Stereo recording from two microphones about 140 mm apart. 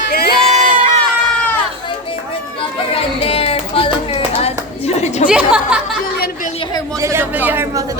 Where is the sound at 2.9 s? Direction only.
45° left (ahead or behind).